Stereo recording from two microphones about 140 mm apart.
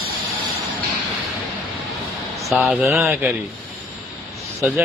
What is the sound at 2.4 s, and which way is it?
Speech, centre (ahead or behind).